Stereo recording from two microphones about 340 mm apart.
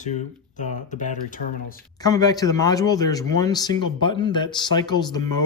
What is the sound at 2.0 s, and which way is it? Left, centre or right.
A man's voice, centre.